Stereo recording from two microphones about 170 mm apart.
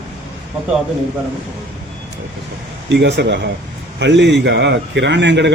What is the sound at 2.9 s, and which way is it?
A man's voice, 85° right.